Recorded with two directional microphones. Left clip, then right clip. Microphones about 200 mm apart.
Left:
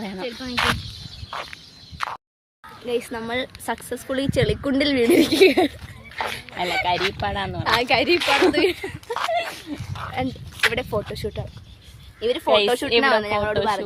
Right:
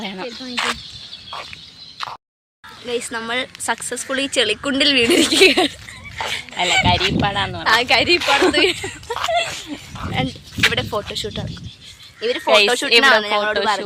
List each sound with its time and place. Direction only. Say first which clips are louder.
0.0 s speech: right 2 dB; centre (ahead or behind)
2.0 s a sound: even; 10° right (ahead or behind)
2.8 s a woman's voice: right 2 dB; 5° left (ahead or behind)
6.1 s speech: right 4 dB; 10° right (ahead or behind)
9.0 s a sound: right 4 dB; 20° right (ahead or behind)
10.2 s speech: right 4 dB; centre (ahead or behind)
12.2 s speech: right 4 dB; 15° right (ahead or behind)
13.6 s speech: right 3 dB; 15° right (ahead or behind)